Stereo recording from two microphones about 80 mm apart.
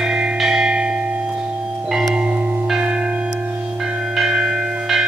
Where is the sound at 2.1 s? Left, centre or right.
Centre.